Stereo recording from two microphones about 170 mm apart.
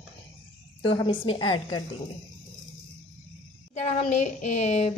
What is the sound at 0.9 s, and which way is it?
Speech, 30° left (ahead or behind).